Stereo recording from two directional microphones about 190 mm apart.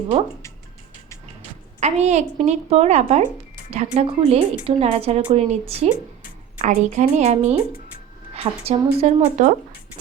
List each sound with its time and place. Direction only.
1.8 s speech: 35° right (ahead or behind)